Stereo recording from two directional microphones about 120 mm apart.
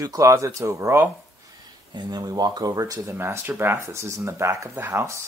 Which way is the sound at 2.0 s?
35° right (ahead or behind).